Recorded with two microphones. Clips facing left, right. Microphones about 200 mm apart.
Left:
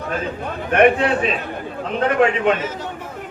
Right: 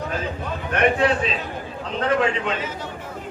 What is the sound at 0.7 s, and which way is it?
A man's voice, 60° left (ahead or behind).